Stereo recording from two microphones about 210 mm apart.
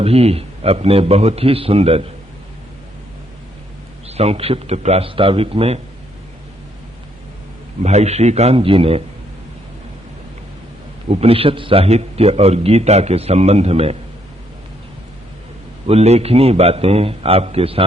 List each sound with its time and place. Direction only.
0.0 s a man's voice: 30° right (ahead or behind)
4.1 s a man's voice: 30° right (ahead or behind)
7.8 s a man's voice: 30° right (ahead or behind)
11.1 s a man's voice: 30° right (ahead or behind)
15.9 s a man's voice: 30° right (ahead or behind)